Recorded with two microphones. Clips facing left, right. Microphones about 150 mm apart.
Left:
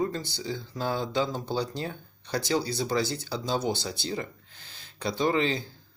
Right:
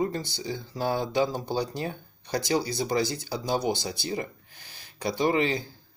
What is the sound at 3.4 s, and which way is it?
Speech, 15° right (ahead or behind).